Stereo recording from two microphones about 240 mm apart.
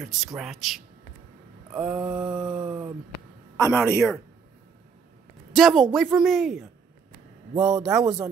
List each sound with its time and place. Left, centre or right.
0.0 s a woman's voice: centre
3.5 s a man's voice: centre
5.5 s a woman's voice: centre
7.5 s a man's voice: centre